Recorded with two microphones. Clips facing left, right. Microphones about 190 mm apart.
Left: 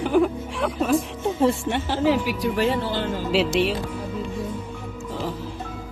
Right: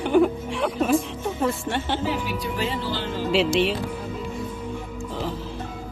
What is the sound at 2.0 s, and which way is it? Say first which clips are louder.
Speech: left 6 dB; 80° left.